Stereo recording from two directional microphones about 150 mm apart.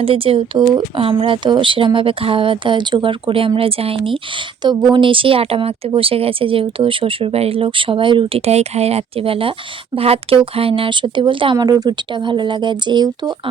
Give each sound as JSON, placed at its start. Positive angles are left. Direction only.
{"t": 0.0, "sound": "speech", "side_deg": -40}